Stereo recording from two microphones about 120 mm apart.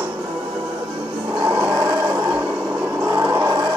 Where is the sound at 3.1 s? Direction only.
20° right (ahead or behind).